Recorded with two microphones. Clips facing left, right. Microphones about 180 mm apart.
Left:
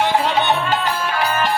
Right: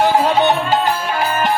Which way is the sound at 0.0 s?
40° right (ahead or behind).